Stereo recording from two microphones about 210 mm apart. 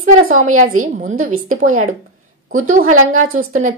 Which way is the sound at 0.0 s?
35° right (ahead or behind).